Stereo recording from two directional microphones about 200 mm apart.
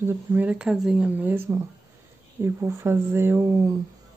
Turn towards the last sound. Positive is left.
turn(degrees=-15)  # may be behind; listen again after turning